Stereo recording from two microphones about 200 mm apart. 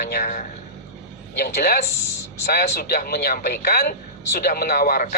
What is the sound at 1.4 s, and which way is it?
Speech, 50° left (ahead or behind).